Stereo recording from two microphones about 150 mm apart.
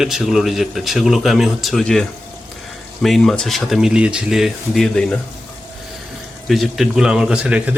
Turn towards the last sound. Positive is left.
turn(degrees=-5)  # may be behind; listen again after turning